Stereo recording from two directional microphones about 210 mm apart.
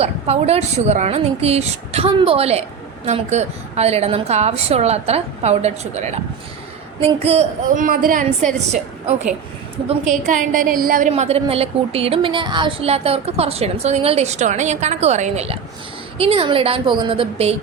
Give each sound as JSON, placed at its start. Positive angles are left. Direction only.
{"t": 0.0, "sound": "a woman's voice", "side_deg": -30}
{"t": 11.1, "sound": "a woman's voice", "side_deg": -30}